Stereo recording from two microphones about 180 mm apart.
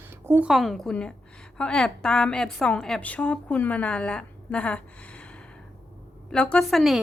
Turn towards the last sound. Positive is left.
turn(degrees=0)  # may be behind; listen again after turning